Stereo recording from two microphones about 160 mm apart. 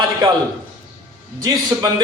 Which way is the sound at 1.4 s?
25° right (ahead or behind).